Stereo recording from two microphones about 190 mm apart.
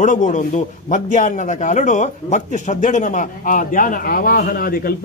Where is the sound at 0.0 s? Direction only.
40° left (ahead or behind).